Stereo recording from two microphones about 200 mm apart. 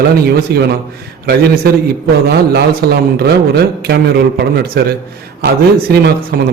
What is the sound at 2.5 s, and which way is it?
A man's voice, 50° right (ahead or behind).